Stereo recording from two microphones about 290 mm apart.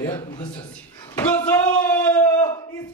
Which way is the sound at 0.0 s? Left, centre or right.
Centre.